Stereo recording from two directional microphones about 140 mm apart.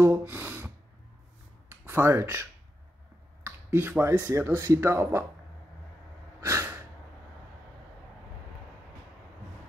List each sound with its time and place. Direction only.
0.0 s gasp: 15° right (ahead or behind)
1.7 s speech: 15° right (ahead or behind)
3.4 s speech: 15° right (ahead or behind)
6.4 s breathing: 15° right (ahead or behind)